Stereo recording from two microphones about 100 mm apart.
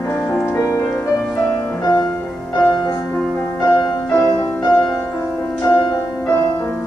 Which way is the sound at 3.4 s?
25° left (ahead or behind).